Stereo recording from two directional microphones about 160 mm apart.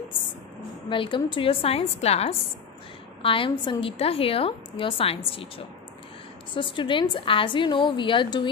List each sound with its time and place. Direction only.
0.8 s a woman's voice: 30° left (ahead or behind)